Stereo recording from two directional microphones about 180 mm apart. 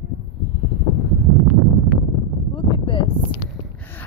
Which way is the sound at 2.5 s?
30° left (ahead or behind).